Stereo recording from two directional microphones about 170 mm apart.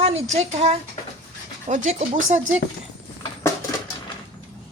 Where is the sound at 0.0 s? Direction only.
35° right (ahead or behind).